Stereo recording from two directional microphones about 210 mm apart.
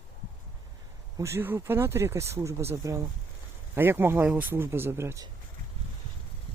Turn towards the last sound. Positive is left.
turn(degrees=-15)  # may be behind; listen again after turning